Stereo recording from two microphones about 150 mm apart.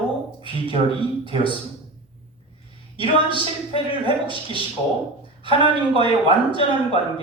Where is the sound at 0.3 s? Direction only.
35° right (ahead or behind).